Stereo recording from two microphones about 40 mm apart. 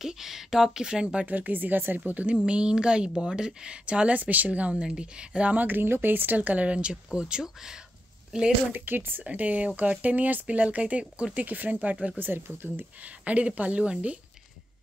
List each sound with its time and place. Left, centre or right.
0.0 s speech: centre
1.2 s speech: right
2.0 s speech: right
2.3 s a woman's voice: right
4.2 s speech: right
4.8 s a woman's voice: right
5.4 s speech: right
5.7 s speech: right
6.3 s a woman's voice: right; by 8.5 s centre
8.7 s speech: right
9.2 s speech: right
11.3 s speech: right
13.2 s speech: right